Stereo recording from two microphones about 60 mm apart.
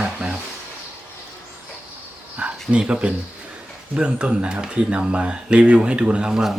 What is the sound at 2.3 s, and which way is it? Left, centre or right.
Speech, right.